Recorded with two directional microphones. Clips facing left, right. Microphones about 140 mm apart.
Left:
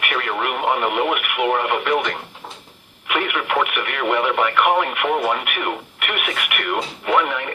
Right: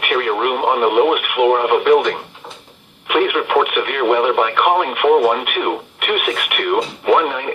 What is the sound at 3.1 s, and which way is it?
Speech, 25° right (ahead or behind).